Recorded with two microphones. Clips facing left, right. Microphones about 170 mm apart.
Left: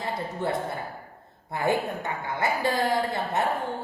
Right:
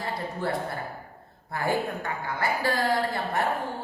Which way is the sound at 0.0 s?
20° left (ahead or behind).